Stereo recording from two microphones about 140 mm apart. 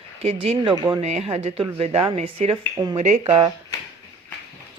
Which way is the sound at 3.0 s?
55° right (ahead or behind).